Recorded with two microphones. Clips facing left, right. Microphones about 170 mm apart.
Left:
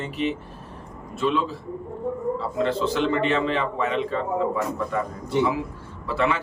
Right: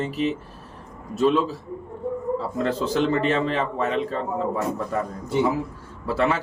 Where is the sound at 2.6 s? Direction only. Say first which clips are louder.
Even; 40° right (ahead or behind).